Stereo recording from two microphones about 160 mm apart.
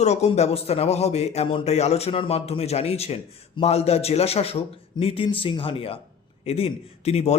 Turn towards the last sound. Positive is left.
turn(degrees=40)  # may be behind; listen again after turning